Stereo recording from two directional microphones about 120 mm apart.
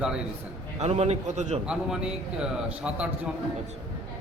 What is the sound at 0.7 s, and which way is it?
Speech, 60° right (ahead or behind).